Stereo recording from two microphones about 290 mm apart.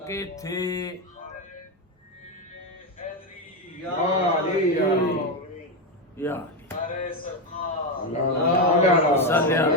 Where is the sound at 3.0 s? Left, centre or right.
Left.